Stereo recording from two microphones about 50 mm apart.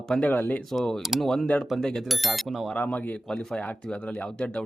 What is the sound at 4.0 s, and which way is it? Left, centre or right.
Speech, left.